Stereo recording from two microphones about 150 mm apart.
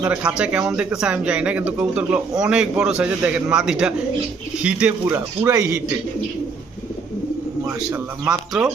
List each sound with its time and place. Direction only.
0.0 s a man's voice: 10° right (ahead or behind)
7.9 s speech: 10° right (ahead or behind)